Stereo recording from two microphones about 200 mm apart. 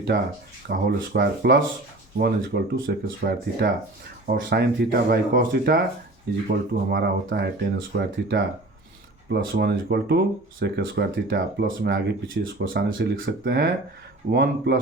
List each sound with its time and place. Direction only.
0.7 s speech: 55° right (ahead or behind)